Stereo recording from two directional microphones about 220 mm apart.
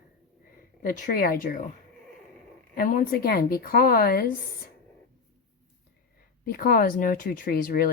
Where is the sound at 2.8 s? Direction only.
40° left (ahead or behind).